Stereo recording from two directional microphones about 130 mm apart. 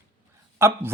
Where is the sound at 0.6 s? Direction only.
20° right (ahead or behind).